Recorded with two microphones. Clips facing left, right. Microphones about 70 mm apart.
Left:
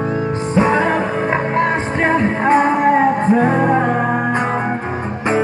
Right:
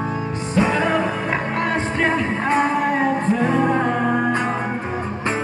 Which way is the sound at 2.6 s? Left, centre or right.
Left.